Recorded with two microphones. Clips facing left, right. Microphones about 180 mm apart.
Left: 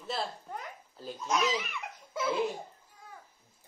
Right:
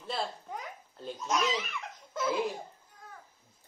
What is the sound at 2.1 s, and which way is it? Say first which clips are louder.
Laughter: even; centre (ahead or behind).